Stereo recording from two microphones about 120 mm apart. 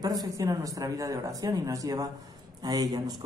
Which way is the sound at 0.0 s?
30° right (ahead or behind).